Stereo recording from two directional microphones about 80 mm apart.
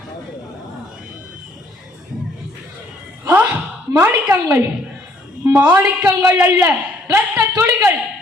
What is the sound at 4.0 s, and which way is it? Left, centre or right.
A woman's voice, right.